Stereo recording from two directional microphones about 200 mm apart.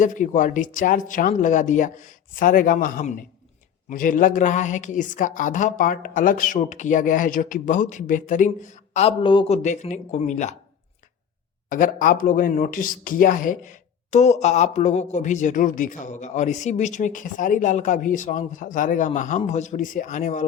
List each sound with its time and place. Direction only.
0.0 s speech: 40° left (ahead or behind)
9.6 s speech: 35° left (ahead or behind)
11.7 s speech: 40° left (ahead or behind)